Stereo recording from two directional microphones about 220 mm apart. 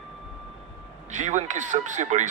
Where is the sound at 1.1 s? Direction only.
35° right (ahead or behind).